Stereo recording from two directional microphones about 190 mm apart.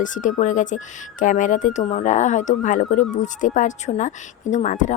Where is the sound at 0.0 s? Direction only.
40° left (ahead or behind).